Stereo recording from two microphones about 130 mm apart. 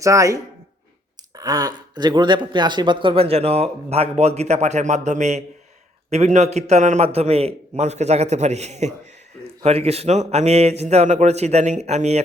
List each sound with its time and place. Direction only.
0.0 s speech: 25° right (ahead or behind)
1.4 s a man's voice: 30° right (ahead or behind); by 12.2 s 55° right (ahead or behind)